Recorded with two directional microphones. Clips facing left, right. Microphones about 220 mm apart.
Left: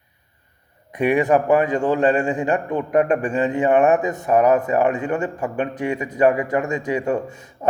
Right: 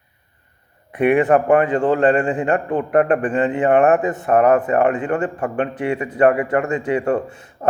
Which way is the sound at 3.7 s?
10° left (ahead or behind).